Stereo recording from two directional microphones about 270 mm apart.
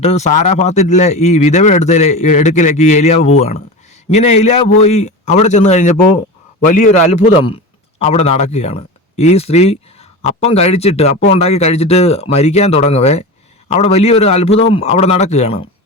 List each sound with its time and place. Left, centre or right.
0.0 s speech: left